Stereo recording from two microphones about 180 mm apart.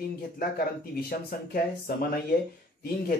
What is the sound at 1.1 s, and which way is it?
A man's voice, 55° left (ahead or behind).